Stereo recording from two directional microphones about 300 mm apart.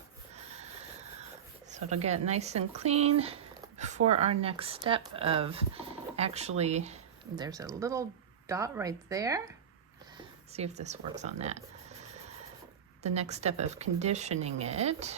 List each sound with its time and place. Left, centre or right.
2.0 s speech: right
13.0 s speech: right